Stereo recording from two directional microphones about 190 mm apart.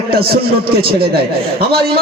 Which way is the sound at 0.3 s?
55° right (ahead or behind).